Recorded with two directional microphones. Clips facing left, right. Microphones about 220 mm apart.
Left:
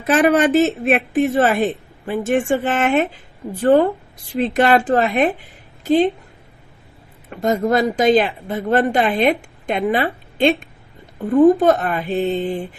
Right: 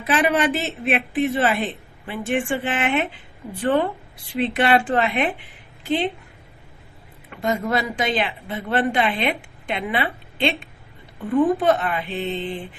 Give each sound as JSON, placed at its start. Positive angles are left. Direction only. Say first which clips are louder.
{"t": 0.1, "sound": "a woman's voice", "louder": "left 6 dB", "side_deg": 45}
{"t": 7.3, "sound": "speech", "louder": "left 6 dB", "side_deg": 40}